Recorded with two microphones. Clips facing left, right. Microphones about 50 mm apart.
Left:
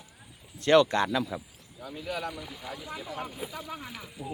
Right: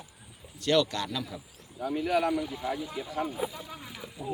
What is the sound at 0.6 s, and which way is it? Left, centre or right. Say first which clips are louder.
Speech: left 5 dB; left.